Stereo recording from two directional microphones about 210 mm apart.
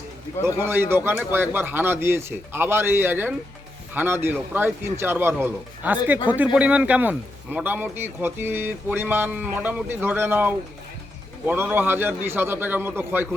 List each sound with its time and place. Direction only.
0.6 s a man's voice: 10° right (ahead or behind)